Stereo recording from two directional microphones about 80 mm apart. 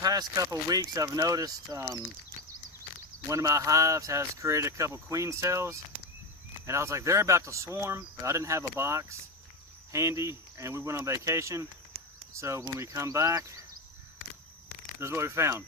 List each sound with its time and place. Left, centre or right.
0.0 s speech: right
3.2 s speech: right
15.0 s speech: right